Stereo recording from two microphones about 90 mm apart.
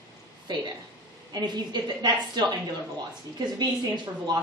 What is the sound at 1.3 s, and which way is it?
A woman's voice, 50° right (ahead or behind).